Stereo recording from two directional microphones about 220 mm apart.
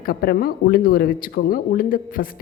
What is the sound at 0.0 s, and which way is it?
Speech, 45° left (ahead or behind).